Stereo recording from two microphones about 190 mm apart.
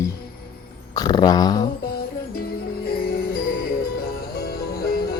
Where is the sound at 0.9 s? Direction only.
20° left (ahead or behind).